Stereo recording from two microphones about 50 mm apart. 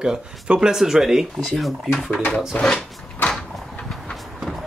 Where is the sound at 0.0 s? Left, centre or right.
Centre.